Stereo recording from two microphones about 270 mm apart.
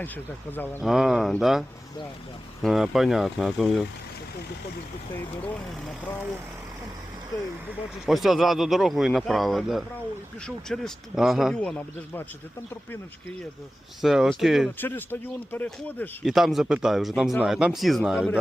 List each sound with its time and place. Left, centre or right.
0.5 s speech: centre
8.0 s speech: centre
14.0 s speech: centre